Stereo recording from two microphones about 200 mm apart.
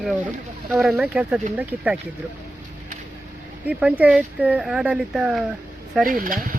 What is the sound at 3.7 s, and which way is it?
Speech, 5° right (ahead or behind).